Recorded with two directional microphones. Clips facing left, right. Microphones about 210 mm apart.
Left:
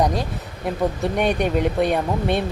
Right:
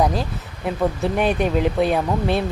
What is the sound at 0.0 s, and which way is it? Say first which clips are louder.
A woman's voice: right 1 dB; centre (ahead or behind).